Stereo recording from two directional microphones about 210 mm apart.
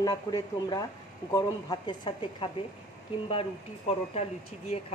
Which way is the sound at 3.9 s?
30° left (ahead or behind).